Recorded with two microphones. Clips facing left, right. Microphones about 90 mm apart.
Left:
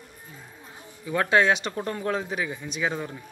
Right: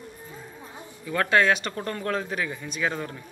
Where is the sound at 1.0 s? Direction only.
20° left (ahead or behind).